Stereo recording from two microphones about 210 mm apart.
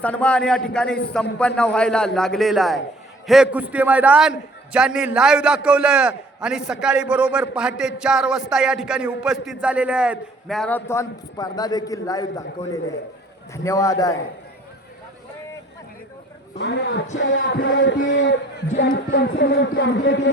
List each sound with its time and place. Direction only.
0.0 s a man's voice: 5° left (ahead or behind)
16.6 s speech: 55° left (ahead or behind)